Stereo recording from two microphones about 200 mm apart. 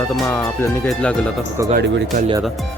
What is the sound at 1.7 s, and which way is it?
Speech, 65° right (ahead or behind).